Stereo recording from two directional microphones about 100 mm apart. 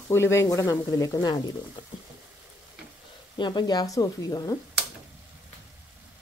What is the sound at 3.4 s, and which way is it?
Speech, 45° left (ahead or behind).